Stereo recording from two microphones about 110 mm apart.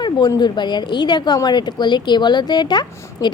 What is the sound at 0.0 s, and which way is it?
A woman's voice, 40° left (ahead or behind).